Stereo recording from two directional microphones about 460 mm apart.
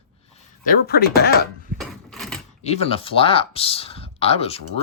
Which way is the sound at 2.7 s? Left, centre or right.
Centre.